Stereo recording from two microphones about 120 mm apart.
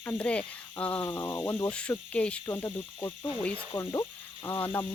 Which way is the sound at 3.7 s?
30° left (ahead or behind).